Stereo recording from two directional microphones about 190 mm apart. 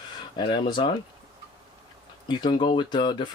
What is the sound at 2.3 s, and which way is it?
Speech, 25° left (ahead or behind).